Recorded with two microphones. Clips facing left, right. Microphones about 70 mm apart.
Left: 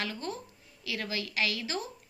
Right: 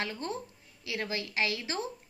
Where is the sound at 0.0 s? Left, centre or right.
Right.